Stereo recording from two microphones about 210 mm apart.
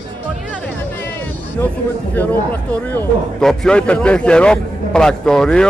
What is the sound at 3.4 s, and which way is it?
Speech, 5° left (ahead or behind).